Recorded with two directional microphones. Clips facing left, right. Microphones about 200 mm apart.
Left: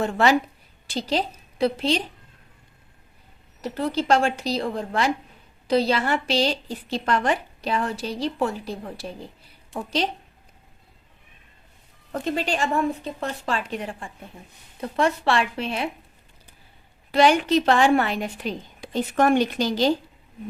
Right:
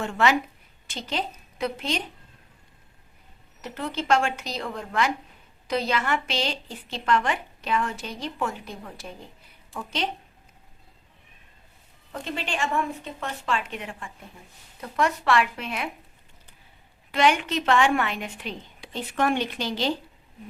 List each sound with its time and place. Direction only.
0.0 s a woman's voice: 35° left (ahead or behind)
3.6 s a woman's voice: 35° left (ahead or behind)
12.1 s a woman's voice: 45° left (ahead or behind)
17.1 s a woman's voice: 35° left (ahead or behind)